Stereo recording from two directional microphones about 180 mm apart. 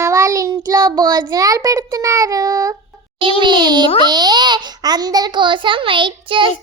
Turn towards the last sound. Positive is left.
turn(degrees=-30)  # may be behind; listen again after turning